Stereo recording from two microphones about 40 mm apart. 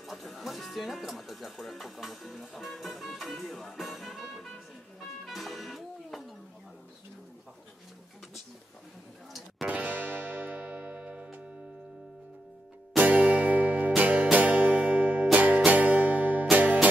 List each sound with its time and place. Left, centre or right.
0.0 s speech: centre
5.2 s music: centre
9.7 s music: right
10.6 s music: right
13.0 s music: right